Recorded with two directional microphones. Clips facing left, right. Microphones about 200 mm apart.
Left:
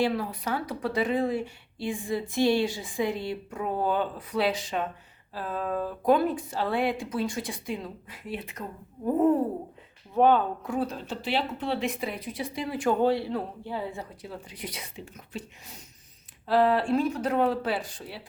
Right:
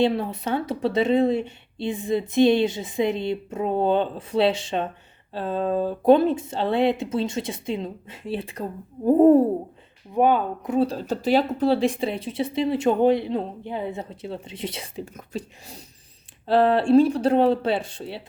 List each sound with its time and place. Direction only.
0.0 s speech: 25° right (ahead or behind)
9.0 s a sound: 35° right (ahead or behind)
10.1 s speech: 10° right (ahead or behind)
10.8 s speech: 40° right (ahead or behind)